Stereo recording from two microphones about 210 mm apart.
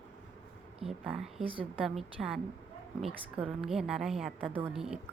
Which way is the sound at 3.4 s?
Centre (ahead or behind).